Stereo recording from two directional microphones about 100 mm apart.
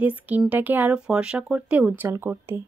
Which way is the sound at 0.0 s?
15° right (ahead or behind).